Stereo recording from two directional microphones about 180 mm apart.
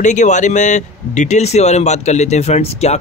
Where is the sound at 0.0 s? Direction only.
40° left (ahead or behind).